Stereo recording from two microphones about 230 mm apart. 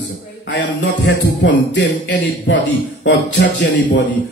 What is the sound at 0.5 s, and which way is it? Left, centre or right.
Speech, left.